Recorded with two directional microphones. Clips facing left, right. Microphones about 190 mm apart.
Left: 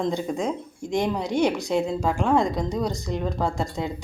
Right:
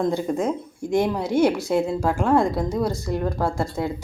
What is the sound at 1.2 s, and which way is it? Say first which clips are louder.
Speech: right 3 dB; 15° left (ahead or behind).